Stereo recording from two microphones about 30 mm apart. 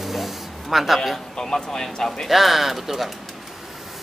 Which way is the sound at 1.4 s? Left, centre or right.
Left.